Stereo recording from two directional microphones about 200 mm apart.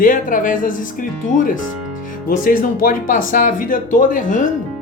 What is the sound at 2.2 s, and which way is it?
Speech, 45° left (ahead or behind).